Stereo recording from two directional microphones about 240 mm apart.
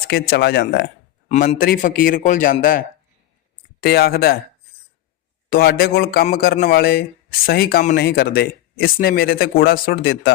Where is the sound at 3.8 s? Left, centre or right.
Left.